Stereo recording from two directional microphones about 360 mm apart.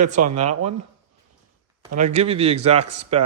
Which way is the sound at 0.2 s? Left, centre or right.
Right.